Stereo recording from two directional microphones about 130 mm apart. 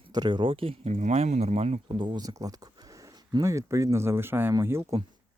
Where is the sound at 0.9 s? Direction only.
60° right (ahead or behind).